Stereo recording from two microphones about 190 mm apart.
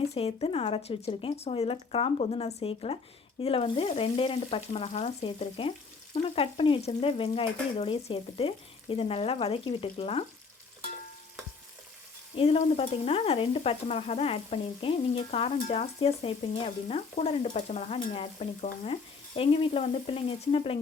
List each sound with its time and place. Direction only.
0.0 s stir: 30° left (ahead or behind)
12.4 s stir: 30° left (ahead or behind)